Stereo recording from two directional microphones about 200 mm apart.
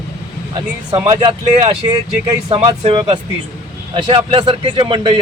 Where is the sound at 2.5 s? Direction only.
25° right (ahead or behind).